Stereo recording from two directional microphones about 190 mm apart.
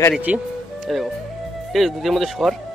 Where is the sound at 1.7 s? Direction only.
Centre (ahead or behind).